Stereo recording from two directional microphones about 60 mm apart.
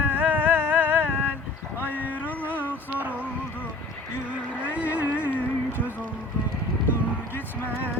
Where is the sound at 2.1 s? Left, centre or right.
Left.